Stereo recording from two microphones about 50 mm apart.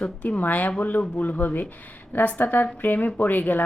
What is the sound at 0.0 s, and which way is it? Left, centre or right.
A woman's voice, left.